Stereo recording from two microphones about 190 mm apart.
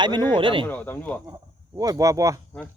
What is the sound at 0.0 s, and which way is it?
Speech, 25° right (ahead or behind).